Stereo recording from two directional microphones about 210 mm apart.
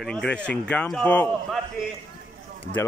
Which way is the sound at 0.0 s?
Centre (ahead or behind).